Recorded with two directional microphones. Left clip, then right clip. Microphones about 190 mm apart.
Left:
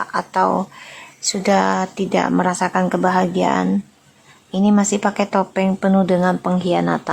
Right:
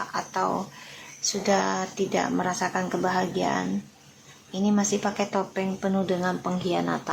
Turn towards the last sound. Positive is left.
turn(degrees=20)  # may be behind; listen again after turning